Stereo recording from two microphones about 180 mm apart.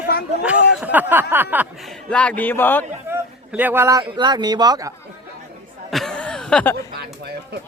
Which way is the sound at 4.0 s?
25° right (ahead or behind).